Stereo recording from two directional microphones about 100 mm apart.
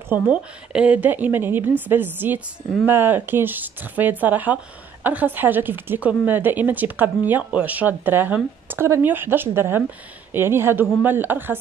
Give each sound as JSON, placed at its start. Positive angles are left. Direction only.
{"t": 0.1, "sound": "a woman's voice", "side_deg": -10}